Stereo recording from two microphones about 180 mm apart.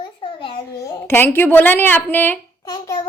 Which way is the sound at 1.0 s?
15° left (ahead or behind).